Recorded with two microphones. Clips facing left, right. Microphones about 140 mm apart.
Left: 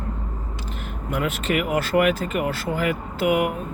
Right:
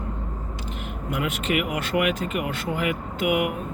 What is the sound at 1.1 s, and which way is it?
Speech, 15° right (ahead or behind).